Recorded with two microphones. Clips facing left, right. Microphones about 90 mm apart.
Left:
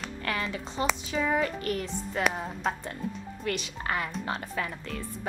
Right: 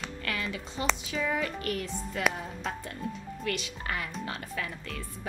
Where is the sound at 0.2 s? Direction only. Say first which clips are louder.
Left 4 dB; 35° left (ahead or behind).